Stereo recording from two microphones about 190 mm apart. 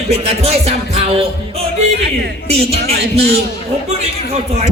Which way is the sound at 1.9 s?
60° right (ahead or behind).